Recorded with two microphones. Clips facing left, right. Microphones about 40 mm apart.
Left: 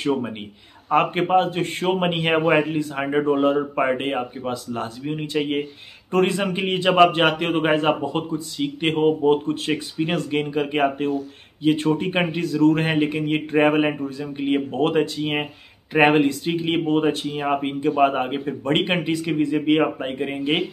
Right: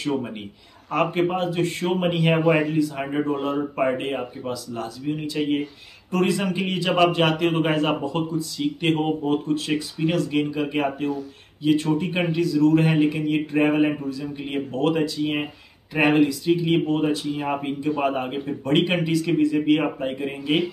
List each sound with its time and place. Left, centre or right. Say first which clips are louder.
0.8 s a man's voice: left 2 dB; left